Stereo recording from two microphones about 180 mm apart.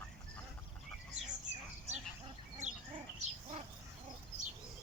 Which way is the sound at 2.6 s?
40° right (ahead or behind).